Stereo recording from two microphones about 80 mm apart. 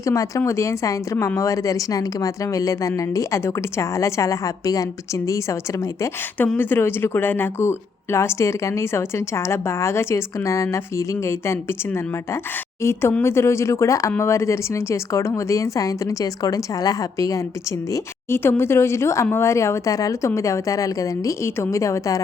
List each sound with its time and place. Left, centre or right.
0.0 s speech: left
6.6 s speech: left
12.8 s speech: left
18.3 s speech: left